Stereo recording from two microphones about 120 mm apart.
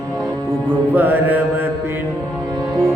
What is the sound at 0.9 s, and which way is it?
Mantra, 15° right (ahead or behind).